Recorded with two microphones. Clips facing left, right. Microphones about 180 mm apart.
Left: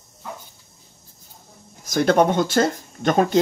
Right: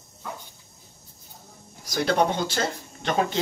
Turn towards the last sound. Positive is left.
turn(degrees=45)  # may be behind; listen again after turning